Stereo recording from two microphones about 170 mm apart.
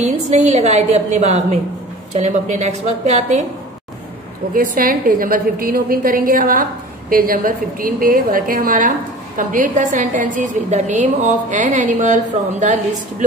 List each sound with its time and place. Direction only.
0.0 s a woman's voice: 40° right (ahead or behind)
4.6 s a woman's voice: 55° right (ahead or behind)